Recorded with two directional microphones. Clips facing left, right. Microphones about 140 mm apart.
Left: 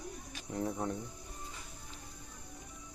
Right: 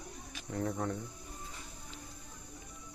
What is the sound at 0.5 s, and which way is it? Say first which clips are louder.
Speech: right 1 dB; 15° left (ahead or behind).